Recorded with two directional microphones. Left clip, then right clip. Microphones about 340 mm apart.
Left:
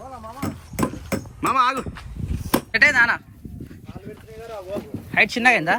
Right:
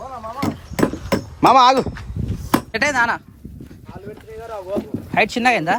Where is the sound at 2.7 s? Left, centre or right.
Centre.